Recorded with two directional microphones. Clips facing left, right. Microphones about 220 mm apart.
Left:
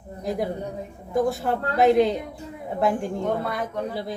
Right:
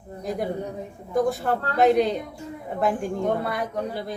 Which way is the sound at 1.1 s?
Centre (ahead or behind).